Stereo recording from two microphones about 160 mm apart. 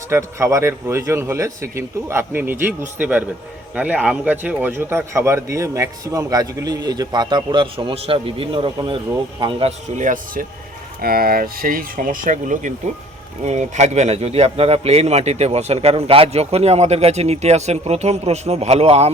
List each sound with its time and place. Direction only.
0.1 s a man's voice: 15° right (ahead or behind); by 9.7 s 35° right (ahead or behind)
10.0 s speech: 55° right (ahead or behind)
11.0 s speech: 70° right (ahead or behind); by 19.1 s 40° right (ahead or behind)